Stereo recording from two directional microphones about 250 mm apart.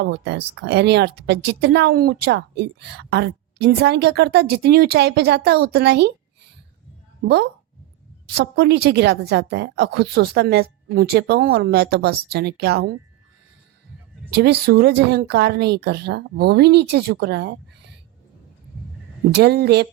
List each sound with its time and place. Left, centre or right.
0.0 s speech: right
8.4 s speech: right
14.3 s speech: right
19.3 s speech: right